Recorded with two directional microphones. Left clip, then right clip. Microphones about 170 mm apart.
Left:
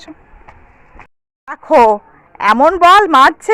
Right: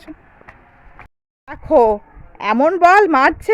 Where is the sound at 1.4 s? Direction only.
Centre (ahead or behind).